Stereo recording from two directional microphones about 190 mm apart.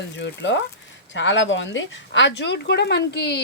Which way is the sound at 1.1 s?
75° left (ahead or behind).